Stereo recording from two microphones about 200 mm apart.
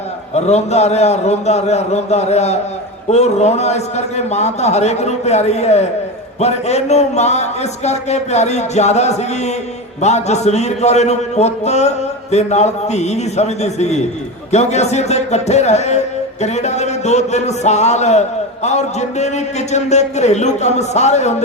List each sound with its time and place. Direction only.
0.3 s a man's voice: 35° left (ahead or behind)